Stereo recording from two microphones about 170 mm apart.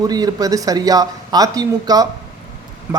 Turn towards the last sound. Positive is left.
turn(degrees=-15)  # may be behind; listen again after turning